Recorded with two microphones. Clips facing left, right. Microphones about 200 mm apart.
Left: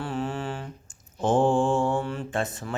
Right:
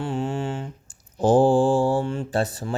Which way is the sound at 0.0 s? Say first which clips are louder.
Right 4 dB; 25° right (ahead or behind).